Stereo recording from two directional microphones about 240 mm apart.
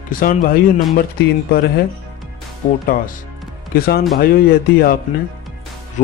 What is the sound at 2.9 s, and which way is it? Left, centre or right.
Speech, left.